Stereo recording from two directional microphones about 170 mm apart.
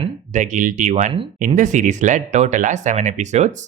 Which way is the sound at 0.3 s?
45° right (ahead or behind).